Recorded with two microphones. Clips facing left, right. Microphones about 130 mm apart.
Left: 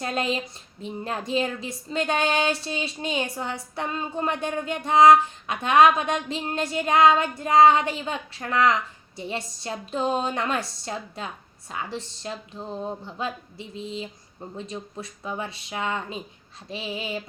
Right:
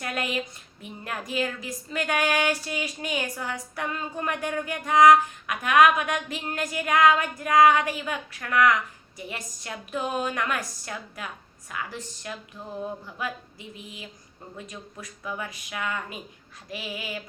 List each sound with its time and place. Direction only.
0.0 s speech: 25° left (ahead or behind)